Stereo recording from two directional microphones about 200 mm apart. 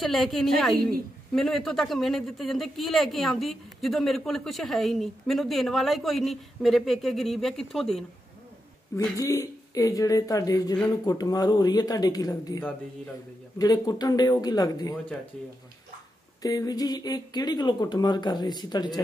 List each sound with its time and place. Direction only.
0.0 s speech: centre (ahead or behind)
8.9 s speech: 15° left (ahead or behind)
16.4 s speech: 20° left (ahead or behind)